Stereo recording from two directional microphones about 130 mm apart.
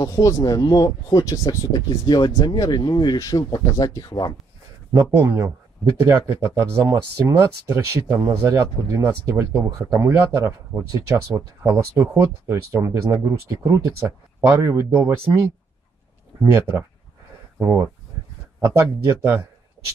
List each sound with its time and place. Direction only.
0.0 s speech: 25° left (ahead or behind)
4.9 s speech: 20° right (ahead or behind)
16.5 s speech: 15° right (ahead or behind)